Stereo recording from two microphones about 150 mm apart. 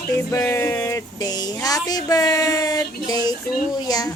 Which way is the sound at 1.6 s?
25° left (ahead or behind).